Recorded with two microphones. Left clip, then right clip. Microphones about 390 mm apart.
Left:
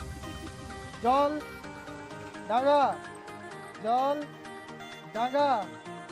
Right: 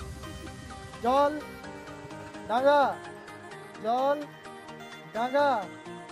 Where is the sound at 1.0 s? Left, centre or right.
Right.